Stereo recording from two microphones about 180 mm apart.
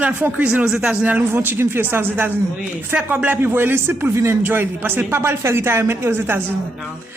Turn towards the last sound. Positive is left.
turn(degrees=-15)  # may be behind; listen again after turning